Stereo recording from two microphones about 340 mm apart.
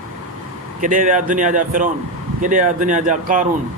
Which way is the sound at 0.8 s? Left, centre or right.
Right.